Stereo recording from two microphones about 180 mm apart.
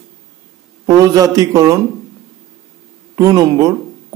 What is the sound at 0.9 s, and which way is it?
Speech, 20° right (ahead or behind).